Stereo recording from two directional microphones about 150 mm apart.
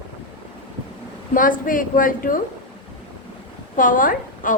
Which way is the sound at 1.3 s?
65° left (ahead or behind).